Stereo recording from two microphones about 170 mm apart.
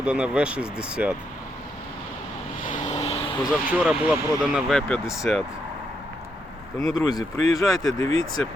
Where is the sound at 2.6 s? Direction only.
50° left (ahead or behind).